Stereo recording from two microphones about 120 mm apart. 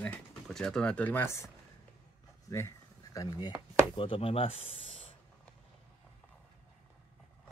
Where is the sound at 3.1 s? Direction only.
35° left (ahead or behind).